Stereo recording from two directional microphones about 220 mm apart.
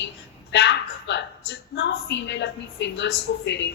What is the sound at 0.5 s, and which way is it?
A woman's voice, 50° left (ahead or behind).